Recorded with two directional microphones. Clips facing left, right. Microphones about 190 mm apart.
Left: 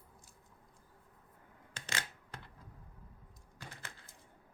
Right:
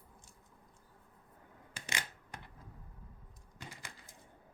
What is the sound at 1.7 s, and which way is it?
Camera, 15° right (ahead or behind).